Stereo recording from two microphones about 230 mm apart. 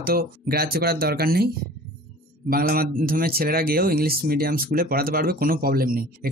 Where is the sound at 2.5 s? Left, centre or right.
Right.